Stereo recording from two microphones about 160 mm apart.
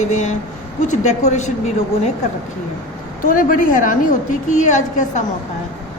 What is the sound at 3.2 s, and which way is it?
A woman's voice, 60° left (ahead or behind).